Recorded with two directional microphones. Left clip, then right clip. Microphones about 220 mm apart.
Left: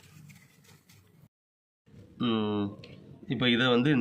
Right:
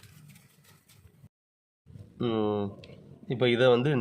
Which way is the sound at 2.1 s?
50° right (ahead or behind).